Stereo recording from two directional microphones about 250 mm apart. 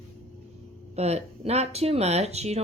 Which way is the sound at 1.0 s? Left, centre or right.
Right.